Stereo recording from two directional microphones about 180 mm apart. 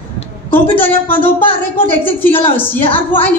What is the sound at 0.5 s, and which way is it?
A woman's voice, 10° left (ahead or behind).